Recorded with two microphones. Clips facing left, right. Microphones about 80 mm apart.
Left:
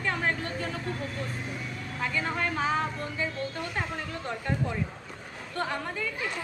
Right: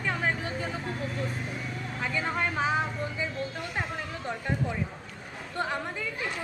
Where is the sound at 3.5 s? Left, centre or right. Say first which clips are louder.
Left 1 dB; centre.